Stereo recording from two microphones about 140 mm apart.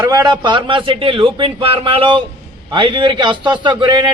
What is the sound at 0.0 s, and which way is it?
A man's voice, 30° right (ahead or behind).